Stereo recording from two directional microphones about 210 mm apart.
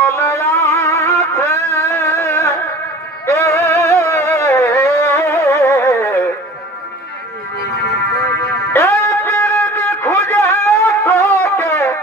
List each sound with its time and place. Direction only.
0.1 s music: 10° left (ahead or behind)
7.8 s music: 50° left (ahead or behind)
8.7 s music: 15° left (ahead or behind)